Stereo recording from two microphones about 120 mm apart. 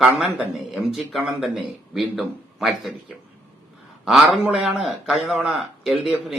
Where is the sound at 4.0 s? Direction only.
Centre (ahead or behind).